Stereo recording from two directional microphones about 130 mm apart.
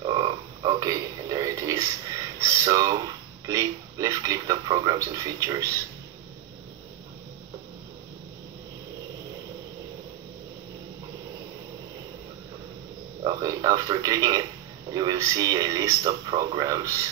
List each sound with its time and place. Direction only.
0.0 s frog: 35° right (ahead or behind)
4.8 s speech: 25° right (ahead or behind)
13.2 s a sound: 30° right (ahead or behind)
14.9 s speech: 30° right (ahead or behind)